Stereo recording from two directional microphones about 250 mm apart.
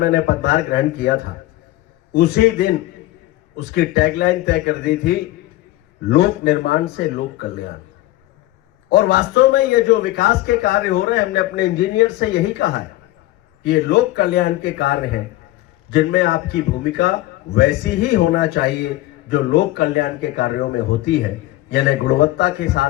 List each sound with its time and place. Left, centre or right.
0.0 s a man's voice: left
8.9 s a man's voice: left